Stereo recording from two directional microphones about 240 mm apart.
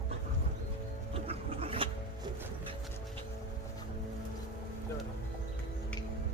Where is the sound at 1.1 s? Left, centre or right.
Right.